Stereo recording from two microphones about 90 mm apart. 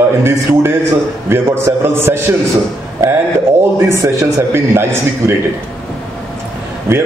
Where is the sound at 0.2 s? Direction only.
30° right (ahead or behind).